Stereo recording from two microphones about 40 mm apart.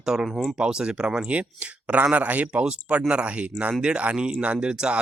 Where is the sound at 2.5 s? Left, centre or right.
Right.